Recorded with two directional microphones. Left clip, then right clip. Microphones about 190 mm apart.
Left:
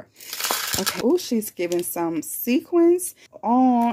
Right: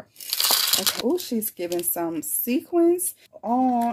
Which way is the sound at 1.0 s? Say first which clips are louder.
Left 4 dB; 25° left (ahead or behind).